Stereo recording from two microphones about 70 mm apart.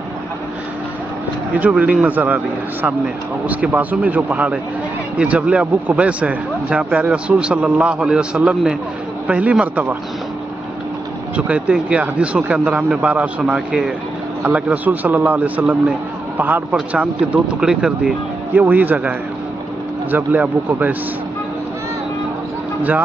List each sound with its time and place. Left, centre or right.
1.5 s a man's voice: right
11.3 s a man's voice: centre
13.5 s speech: centre
14.4 s a man's voice: right
17.6 s speech: centre
18.5 s a man's voice: right